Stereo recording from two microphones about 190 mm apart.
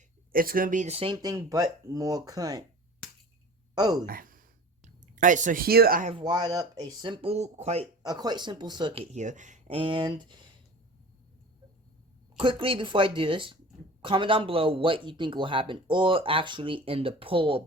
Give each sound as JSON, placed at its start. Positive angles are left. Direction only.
{"t": 0.3, "sound": "speech", "side_deg": -50}
{"t": 1.1, "sound": "a man's voice", "side_deg": -20}
{"t": 3.8, "sound": "a man's voice", "side_deg": -20}
{"t": 4.0, "sound": "a sound", "side_deg": -50}
{"t": 6.1, "sound": "a man's voice", "side_deg": -25}
{"t": 8.0, "sound": "a man's voice", "side_deg": -20}
{"t": 12.4, "sound": "a man's voice", "side_deg": -25}